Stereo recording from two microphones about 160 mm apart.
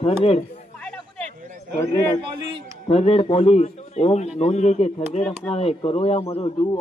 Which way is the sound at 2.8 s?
35° left (ahead or behind).